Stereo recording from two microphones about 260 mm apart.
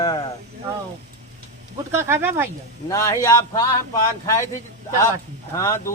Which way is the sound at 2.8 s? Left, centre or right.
Centre.